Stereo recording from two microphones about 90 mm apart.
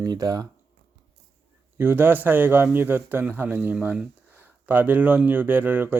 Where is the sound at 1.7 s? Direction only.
25° right (ahead or behind).